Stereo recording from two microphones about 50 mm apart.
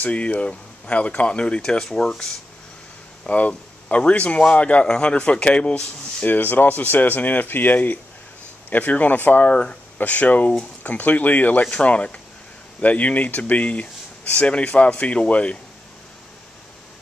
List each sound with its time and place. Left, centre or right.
0.0 s a man's voice: left
1.6 s speech: centre
3.3 s a man's voice: left
6.2 s speech: left
9.5 s a man's voice: left
9.9 s speech: left
11.6 s a man's voice: left